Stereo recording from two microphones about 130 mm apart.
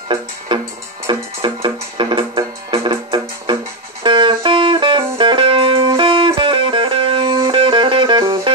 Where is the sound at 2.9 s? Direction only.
30° right (ahead or behind).